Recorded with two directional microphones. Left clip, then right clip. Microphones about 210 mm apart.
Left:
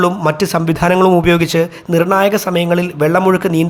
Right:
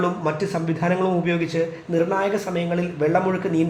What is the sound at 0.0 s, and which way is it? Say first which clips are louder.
A man's voice: left 9 dB; 40° left (ahead or behind).